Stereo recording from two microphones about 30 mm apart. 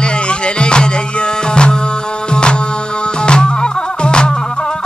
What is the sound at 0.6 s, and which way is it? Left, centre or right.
Music, left.